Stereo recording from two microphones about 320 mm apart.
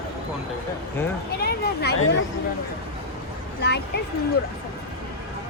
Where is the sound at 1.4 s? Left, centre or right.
Left.